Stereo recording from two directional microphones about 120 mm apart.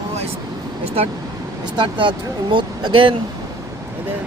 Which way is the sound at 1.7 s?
45° right (ahead or behind).